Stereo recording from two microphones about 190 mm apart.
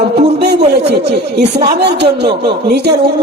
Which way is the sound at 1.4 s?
60° right (ahead or behind).